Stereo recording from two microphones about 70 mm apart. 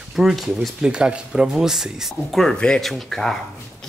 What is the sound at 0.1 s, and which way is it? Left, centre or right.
Speech, centre.